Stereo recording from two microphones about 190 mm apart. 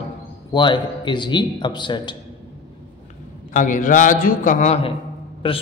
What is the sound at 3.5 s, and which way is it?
A man's voice, 45° left (ahead or behind).